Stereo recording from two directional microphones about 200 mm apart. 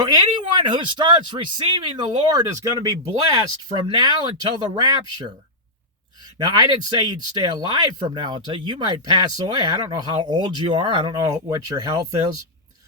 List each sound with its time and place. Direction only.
0.1 s speech: 20° right (ahead or behind)
6.4 s speech: 20° right (ahead or behind)